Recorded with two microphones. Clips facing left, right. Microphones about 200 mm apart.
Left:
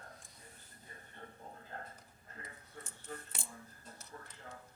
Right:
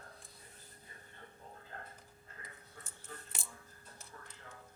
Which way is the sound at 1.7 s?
35° left (ahead or behind).